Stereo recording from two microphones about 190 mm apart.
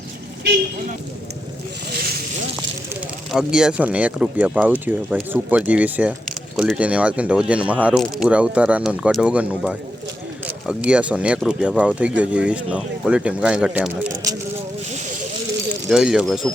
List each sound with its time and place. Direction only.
1.9 s vehicle: 55° right (ahead or behind)
3.3 s speech: 5° right (ahead or behind)
14.8 s snake: 40° right (ahead or behind)
15.9 s speech: 5° right (ahead or behind)